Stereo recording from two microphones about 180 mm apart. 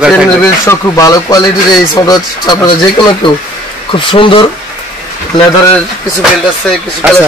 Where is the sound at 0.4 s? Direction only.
15° left (ahead or behind).